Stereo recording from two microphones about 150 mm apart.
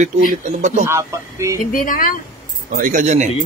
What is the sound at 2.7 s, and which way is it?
Speech, 60° right (ahead or behind).